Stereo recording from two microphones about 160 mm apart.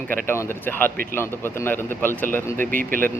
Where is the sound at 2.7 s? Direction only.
60° right (ahead or behind).